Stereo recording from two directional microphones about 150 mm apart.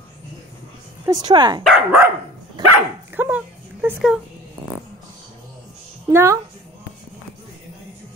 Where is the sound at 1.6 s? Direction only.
Centre (ahead or behind).